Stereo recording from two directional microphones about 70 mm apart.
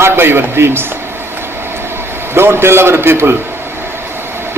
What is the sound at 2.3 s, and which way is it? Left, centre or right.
Speech, right.